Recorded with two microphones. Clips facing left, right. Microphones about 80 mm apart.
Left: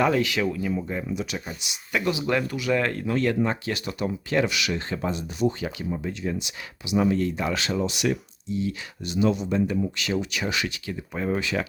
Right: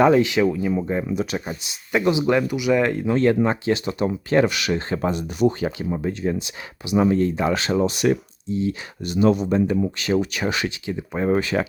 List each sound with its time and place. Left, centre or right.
0.0 s speech: right
0.9 s speech: right; by 3.2 s centre
3.2 s speech: right
4.9 s speech: right
5.6 s speech: right
9.0 s speech: right
10.7 s speech: right
11.3 s speech: right